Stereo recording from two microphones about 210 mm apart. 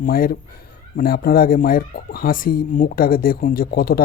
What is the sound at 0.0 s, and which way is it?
Speech, 45° left (ahead or behind).